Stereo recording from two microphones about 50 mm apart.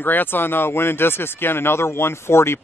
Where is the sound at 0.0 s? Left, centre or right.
Left.